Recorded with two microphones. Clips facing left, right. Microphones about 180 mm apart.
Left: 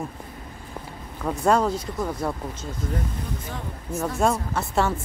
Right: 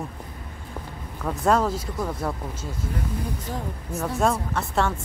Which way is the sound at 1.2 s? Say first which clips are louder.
Left 1 dB; centre (ahead or behind).